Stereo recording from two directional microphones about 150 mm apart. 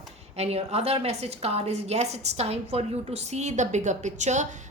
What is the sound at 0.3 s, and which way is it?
A woman's voice, 45° right (ahead or behind).